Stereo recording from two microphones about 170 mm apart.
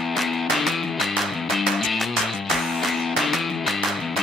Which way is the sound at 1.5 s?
Centre (ahead or behind).